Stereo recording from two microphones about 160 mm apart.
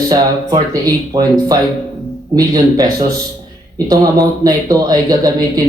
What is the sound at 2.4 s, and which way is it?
Speech, 25° right (ahead or behind).